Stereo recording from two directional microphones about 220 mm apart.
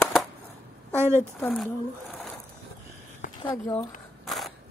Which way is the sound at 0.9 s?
10° right (ahead or behind).